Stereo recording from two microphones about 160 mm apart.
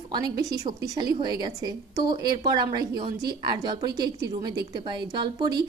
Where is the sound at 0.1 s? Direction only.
25° right (ahead or behind).